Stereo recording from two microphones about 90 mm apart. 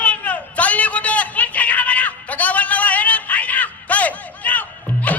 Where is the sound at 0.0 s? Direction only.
15° left (ahead or behind).